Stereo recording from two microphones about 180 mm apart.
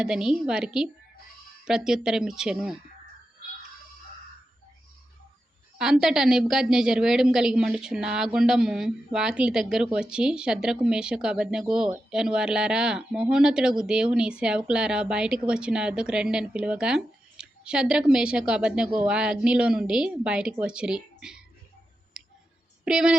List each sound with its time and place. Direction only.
0.0 s speech: 5° right (ahead or behind)
5.7 s speech: 5° right (ahead or behind)
22.2 s clicking: 5° right (ahead or behind)
22.8 s speech: 5° right (ahead or behind)